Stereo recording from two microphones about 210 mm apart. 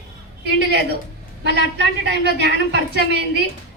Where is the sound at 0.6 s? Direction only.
55° right (ahead or behind).